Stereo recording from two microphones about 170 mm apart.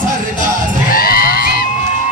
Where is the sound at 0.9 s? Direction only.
60° left (ahead or behind).